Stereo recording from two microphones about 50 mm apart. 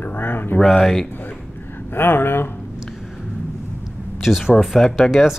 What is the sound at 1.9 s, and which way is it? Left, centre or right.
Speech, left.